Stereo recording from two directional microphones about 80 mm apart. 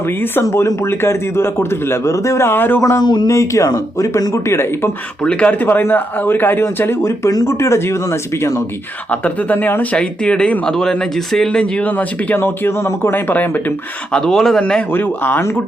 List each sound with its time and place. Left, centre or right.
0.9 s a man's voice: left
3.0 s speech: left
3.2 s a man's voice: left
4.4 s a man's voice: left
5.2 s a man's voice: centre; by 8.6 s left
9.2 s speech: left
9.9 s speech: centre
14.1 s speech: centre
14.9 s speech: left